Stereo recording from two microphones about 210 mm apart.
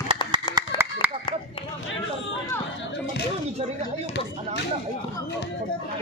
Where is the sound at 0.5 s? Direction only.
10° right (ahead or behind).